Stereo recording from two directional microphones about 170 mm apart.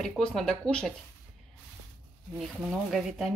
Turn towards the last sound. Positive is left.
turn(degrees=0)  # may be behind; listen again after turning